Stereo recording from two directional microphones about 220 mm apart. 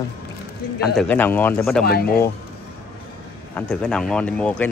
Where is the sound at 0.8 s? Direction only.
5° left (ahead or behind).